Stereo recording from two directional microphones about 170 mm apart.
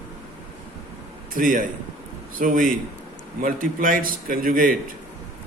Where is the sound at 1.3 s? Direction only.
50° right (ahead or behind).